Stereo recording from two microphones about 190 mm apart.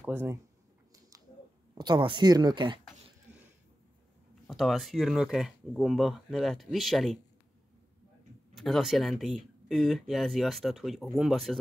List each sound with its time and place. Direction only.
0.0 s speech: 10° right (ahead or behind)
1.8 s speech: 25° right (ahead or behind)
4.5 s speech: centre (ahead or behind)
8.5 s speech: centre (ahead or behind)